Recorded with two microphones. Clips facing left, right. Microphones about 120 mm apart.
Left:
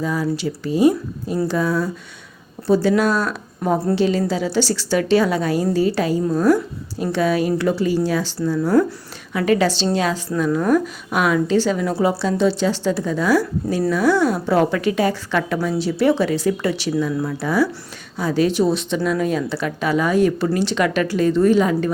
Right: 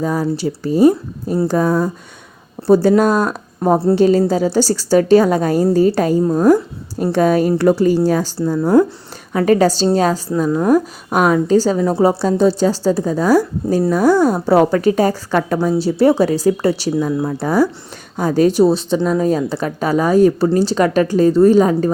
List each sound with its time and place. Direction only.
0.0 s speech: 40° right (ahead or behind)
9.3 s speech: 40° right (ahead or behind)
10.3 s speech: 30° right (ahead or behind)
17.2 s speech: 25° right (ahead or behind)
17.4 s speech: 40° right (ahead or behind)